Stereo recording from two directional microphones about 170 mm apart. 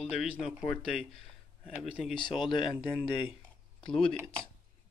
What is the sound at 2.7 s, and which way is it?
Speech, centre (ahead or behind).